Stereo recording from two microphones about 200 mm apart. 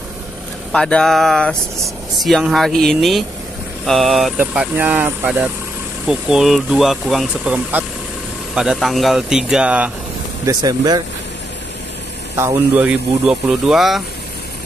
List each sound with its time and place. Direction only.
0.7 s speech: 5° left (ahead or behind)
10.4 s speech: 20° right (ahead or behind)
12.4 s speech: 10° right (ahead or behind)